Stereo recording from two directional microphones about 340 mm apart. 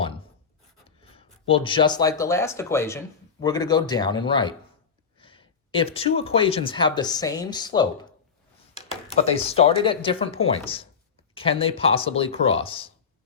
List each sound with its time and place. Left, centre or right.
0.9 s speech: centre